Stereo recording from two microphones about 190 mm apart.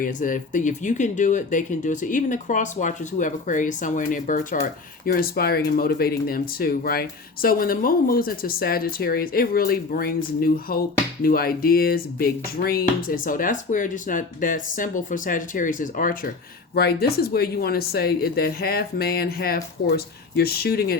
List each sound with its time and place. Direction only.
0.0 s speech: 45° left (ahead or behind)
16.7 s speech: 55° left (ahead or behind)